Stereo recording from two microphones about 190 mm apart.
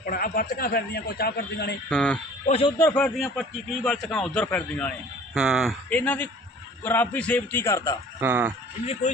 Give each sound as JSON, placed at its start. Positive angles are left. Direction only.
{"t": 0.0, "sound": "a man's voice", "side_deg": 50}
{"t": 1.9, "sound": "speech", "side_deg": 5}
{"t": 2.5, "sound": "speech", "side_deg": 30}
{"t": 2.7, "sound": "a man's voice", "side_deg": 10}
{"t": 8.2, "sound": "speech", "side_deg": -10}
{"t": 9.1, "sound": "speech", "side_deg": 40}